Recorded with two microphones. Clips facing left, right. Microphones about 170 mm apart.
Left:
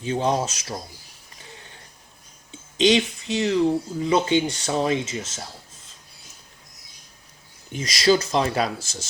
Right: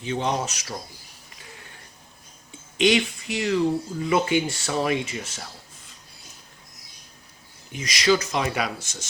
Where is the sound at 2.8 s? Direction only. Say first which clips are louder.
Left 2 dB; 25° left (ahead or behind).